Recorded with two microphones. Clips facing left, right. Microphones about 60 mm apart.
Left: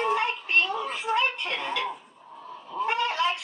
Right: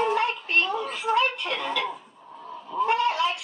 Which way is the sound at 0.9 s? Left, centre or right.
Left.